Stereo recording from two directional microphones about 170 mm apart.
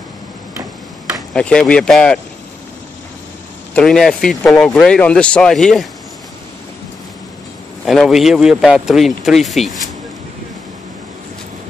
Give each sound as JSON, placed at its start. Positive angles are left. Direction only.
{"t": 1.3, "sound": "speech", "side_deg": 5}
{"t": 3.7, "sound": "speech", "side_deg": 5}
{"t": 7.8, "sound": "speech", "side_deg": 0}